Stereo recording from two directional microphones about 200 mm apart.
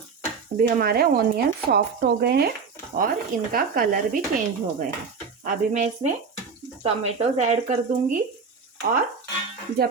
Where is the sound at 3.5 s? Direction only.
45° right (ahead or behind).